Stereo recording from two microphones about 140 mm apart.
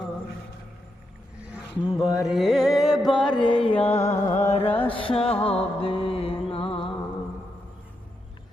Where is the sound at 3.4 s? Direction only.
40° left (ahead or behind).